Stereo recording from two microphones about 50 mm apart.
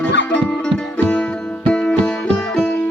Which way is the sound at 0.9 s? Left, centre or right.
Left.